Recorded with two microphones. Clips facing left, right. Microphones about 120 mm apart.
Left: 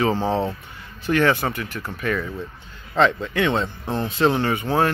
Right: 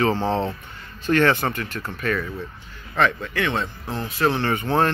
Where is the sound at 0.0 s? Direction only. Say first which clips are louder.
Even; 15° left (ahead or behind).